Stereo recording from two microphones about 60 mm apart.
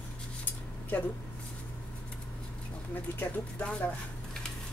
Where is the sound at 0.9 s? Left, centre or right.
Left.